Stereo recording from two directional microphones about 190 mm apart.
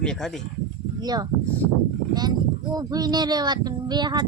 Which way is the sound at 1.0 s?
20° right (ahead or behind).